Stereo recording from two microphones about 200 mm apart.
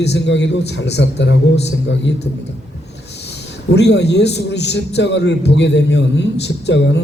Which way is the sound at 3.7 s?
60° left (ahead or behind).